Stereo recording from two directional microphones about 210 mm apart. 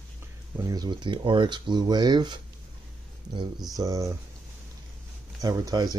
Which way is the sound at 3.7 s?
15° right (ahead or behind).